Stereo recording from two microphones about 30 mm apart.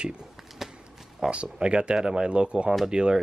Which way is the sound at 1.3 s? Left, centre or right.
Right.